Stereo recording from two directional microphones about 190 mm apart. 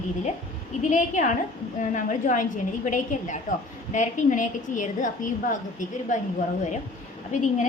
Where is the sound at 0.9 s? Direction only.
40° left (ahead or behind).